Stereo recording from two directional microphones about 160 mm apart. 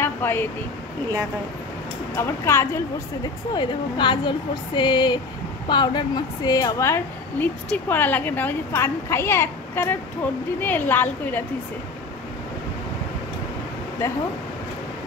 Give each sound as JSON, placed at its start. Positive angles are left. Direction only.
{"t": 0.0, "sound": "a sound", "side_deg": 15}
{"t": 2.1, "sound": "a woman's voice", "side_deg": 15}
{"t": 3.5, "sound": "a woman's voice", "side_deg": 30}